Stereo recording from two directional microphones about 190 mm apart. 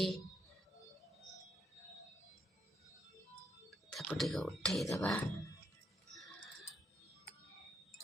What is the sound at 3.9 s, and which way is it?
Speech, centre (ahead or behind).